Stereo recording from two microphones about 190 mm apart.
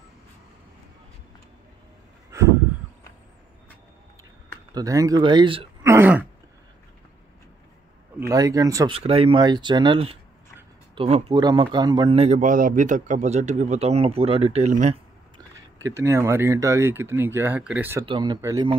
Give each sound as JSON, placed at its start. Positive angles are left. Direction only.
{"t": 2.3, "sound": "a sound", "side_deg": -15}
{"t": 4.7, "sound": "speech", "side_deg": -20}
{"t": 5.9, "sound": "throat clearing", "side_deg": -10}
{"t": 8.3, "sound": "speech", "side_deg": -20}
{"t": 8.9, "sound": "a man's voice", "side_deg": -30}
{"t": 15.3, "sound": "speech", "side_deg": -20}
{"t": 18.0, "sound": "speech", "side_deg": -25}